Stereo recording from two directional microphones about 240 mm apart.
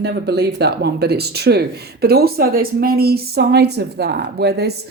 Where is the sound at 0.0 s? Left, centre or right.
Right.